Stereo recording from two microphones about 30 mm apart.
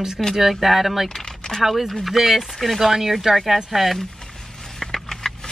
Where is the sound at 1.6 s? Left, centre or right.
Centre.